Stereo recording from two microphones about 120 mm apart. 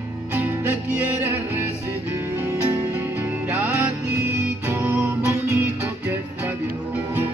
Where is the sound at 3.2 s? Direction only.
10° right (ahead or behind).